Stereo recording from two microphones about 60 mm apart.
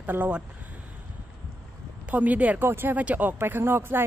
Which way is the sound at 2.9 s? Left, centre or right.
Right.